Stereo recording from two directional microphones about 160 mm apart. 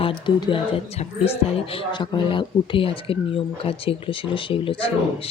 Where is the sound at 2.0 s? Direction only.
30° left (ahead or behind).